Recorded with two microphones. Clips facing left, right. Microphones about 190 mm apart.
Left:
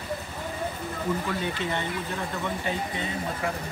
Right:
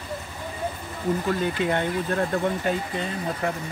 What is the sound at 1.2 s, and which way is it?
Speech, 50° right (ahead or behind).